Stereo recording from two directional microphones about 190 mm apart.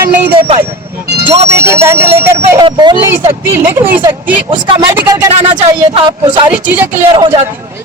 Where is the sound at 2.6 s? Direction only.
25° right (ahead or behind).